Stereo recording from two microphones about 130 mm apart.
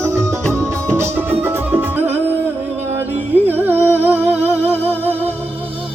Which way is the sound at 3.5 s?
15° right (ahead or behind).